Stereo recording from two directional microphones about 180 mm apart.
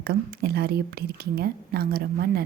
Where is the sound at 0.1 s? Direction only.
60° right (ahead or behind).